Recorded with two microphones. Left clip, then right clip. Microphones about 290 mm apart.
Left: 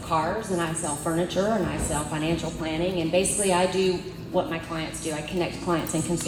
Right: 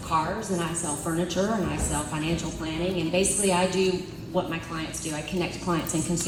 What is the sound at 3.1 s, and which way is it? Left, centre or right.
Speech, left.